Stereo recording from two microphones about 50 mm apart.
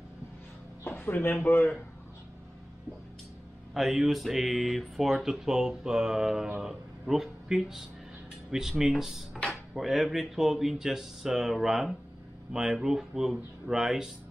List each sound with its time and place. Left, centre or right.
0.8 s speech: left
3.7 s speech: centre